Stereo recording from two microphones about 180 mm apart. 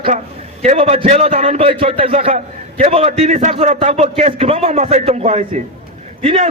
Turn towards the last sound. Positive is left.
turn(degrees=-30)  # may be behind; listen again after turning